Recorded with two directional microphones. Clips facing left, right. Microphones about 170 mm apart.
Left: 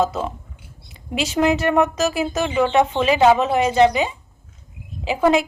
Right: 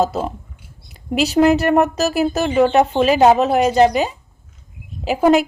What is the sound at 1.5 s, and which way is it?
Speech, 40° right (ahead or behind).